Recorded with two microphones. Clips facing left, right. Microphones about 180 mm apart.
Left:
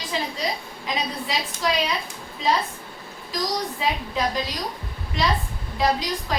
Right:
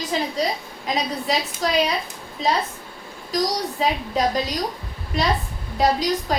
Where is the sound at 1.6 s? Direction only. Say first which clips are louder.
Right 1 dB; 40° right (ahead or behind).